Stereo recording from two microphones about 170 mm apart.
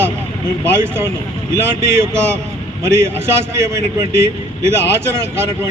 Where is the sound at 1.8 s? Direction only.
15° right (ahead or behind).